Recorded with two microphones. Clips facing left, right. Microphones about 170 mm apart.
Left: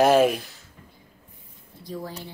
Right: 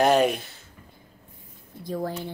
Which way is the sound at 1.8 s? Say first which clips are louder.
Right 5 dB; 50° right (ahead or behind).